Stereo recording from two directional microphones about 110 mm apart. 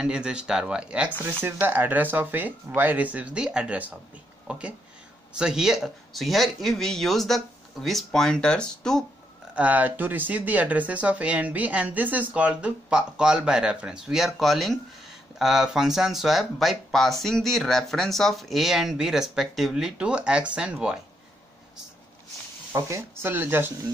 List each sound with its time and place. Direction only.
0.0 s speech: 10° right (ahead or behind)
9.6 s speech: 15° right (ahead or behind)
22.7 s speech: 25° right (ahead or behind)